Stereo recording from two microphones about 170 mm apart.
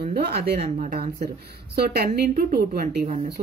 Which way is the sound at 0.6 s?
50° right (ahead or behind).